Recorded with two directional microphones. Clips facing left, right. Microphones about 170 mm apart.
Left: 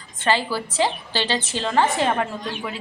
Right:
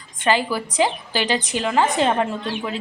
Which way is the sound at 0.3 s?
15° right (ahead or behind).